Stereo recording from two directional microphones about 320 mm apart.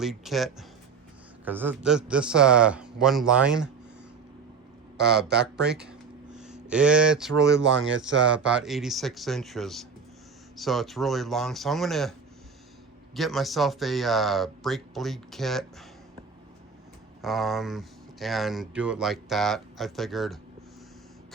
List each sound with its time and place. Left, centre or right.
0.0 s speech: centre
4.9 s speech: centre
7.5 s speech: right
8.3 s speech: centre
13.1 s speech: centre
17.2 s speech: centre